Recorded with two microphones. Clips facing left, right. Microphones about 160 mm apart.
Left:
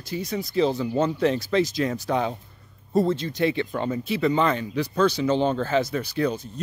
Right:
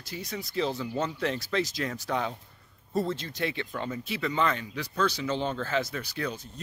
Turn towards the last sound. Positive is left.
turn(degrees=25)  # may be behind; listen again after turning